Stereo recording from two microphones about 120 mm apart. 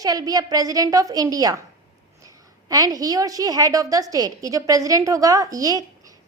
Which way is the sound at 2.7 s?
30° right (ahead or behind).